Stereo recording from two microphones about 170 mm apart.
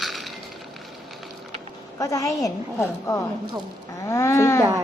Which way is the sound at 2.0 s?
20° left (ahead or behind).